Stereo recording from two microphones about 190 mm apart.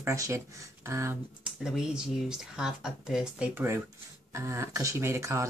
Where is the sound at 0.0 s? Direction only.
15° right (ahead or behind).